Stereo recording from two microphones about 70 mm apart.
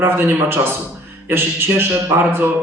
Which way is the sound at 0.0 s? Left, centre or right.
Right.